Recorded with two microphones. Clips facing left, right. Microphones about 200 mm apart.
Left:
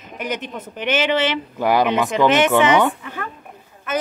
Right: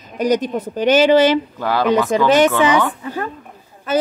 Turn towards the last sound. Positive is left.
turn(degrees=-30)  # may be behind; listen again after turning